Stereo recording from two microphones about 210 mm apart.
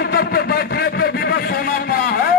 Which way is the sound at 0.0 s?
50° left (ahead or behind).